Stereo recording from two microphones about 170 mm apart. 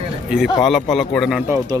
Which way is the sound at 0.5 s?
Centre (ahead or behind).